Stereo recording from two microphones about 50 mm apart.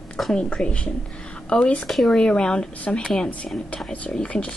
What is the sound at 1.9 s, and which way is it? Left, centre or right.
Speech, centre.